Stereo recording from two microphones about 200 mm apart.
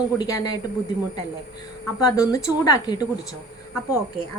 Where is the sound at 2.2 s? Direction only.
20° left (ahead or behind).